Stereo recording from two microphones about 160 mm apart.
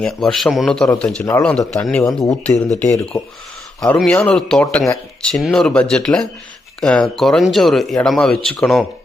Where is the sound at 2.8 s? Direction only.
15° left (ahead or behind).